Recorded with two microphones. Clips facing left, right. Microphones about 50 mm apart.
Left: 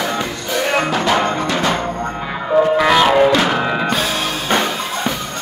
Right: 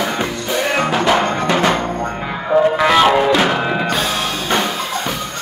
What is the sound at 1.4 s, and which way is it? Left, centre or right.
Music, right.